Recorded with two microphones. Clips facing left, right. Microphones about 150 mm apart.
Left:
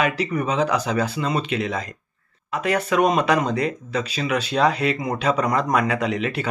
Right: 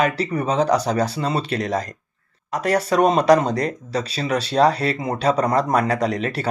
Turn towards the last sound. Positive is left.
turn(degrees=-40)  # may be behind; listen again after turning